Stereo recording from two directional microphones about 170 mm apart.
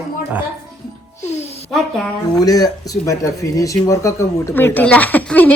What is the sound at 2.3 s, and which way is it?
A man's voice, 20° left (ahead or behind).